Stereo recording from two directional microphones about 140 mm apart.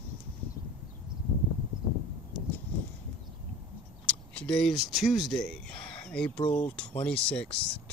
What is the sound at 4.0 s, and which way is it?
Speech, 10° left (ahead or behind).